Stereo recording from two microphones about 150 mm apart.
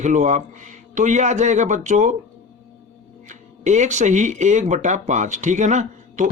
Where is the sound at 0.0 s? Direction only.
55° right (ahead or behind).